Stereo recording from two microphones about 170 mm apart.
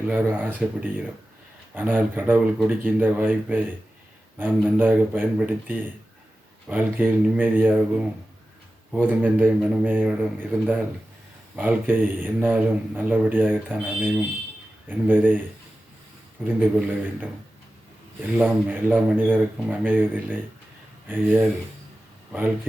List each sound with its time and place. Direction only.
0.3 s a man's voice: 10° right (ahead or behind)
11.5 s a man's voice: 10° right (ahead or behind)
16.4 s a man's voice: 10° right (ahead or behind)
18.3 s a man's voice: 10° right (ahead or behind)